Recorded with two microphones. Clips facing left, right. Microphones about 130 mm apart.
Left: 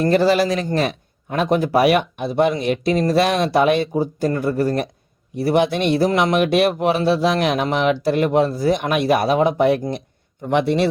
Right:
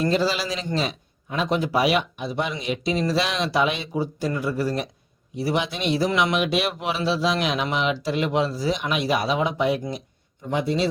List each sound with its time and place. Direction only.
0.0 s a man's voice: 55° left (ahead or behind)
10.4 s a man's voice: 70° left (ahead or behind)